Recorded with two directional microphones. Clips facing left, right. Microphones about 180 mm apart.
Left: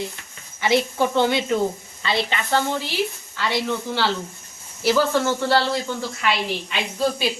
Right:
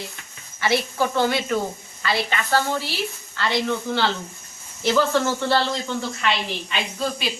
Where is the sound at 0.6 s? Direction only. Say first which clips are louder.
Left 2 dB; 20° left (ahead or behind).